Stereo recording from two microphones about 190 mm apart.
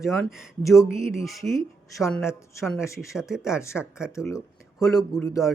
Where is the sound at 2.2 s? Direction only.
15° left (ahead or behind).